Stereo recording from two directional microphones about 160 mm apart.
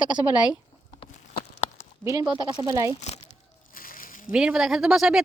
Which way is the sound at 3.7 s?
60° left (ahead or behind).